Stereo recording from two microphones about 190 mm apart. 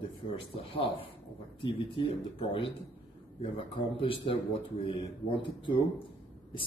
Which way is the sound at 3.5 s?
25° left (ahead or behind).